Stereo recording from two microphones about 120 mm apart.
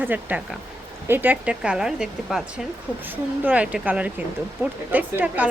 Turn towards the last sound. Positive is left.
turn(degrees=-10)  # may be behind; listen again after turning